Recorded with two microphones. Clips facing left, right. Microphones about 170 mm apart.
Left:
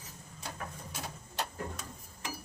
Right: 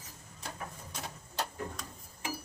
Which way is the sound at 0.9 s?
5° left (ahead or behind).